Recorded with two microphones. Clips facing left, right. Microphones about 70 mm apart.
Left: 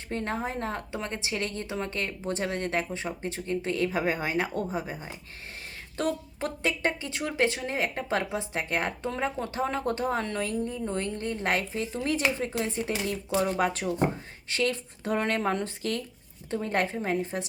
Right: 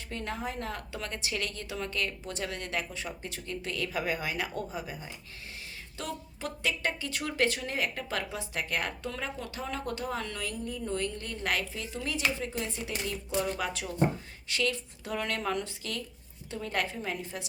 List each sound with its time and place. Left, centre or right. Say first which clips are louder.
0.1 s speech: left 5 dB; left